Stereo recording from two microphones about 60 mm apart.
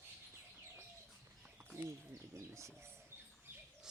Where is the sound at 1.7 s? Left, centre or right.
Right.